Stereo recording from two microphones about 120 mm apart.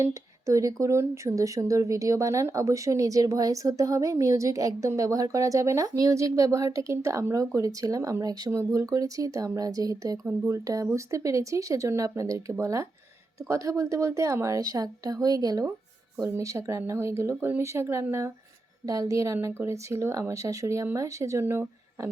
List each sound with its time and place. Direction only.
0.0 s speech: 25° right (ahead or behind)